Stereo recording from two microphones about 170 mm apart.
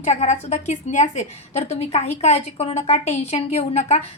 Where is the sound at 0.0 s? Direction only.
45° left (ahead or behind).